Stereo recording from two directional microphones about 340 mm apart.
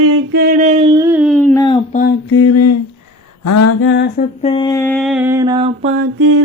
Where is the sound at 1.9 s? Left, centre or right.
Left.